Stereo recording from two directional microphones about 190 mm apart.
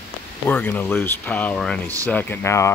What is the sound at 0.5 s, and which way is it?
Speech, 10° left (ahead or behind).